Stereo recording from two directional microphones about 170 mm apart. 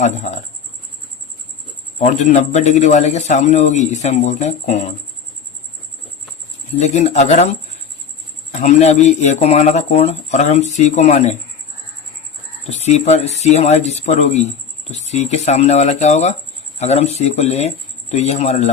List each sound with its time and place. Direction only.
0.0 s speech: 45° left (ahead or behind)
2.0 s a man's voice: 45° left (ahead or behind)
6.7 s speech: 40° left (ahead or behind)
8.5 s speech: 40° left (ahead or behind)
12.6 s speech: 40° left (ahead or behind)